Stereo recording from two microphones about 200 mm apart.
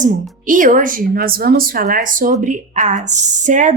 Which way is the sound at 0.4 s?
40° right (ahead or behind).